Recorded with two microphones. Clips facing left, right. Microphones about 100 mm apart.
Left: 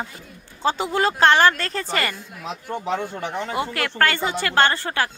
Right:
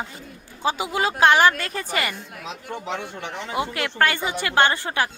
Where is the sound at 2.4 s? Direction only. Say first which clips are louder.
Left 4 dB; 35° left (ahead or behind).